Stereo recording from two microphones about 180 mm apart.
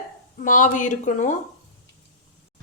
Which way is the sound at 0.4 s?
45° left (ahead or behind).